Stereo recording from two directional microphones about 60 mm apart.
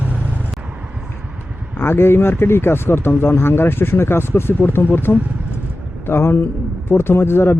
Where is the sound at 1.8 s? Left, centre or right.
Left.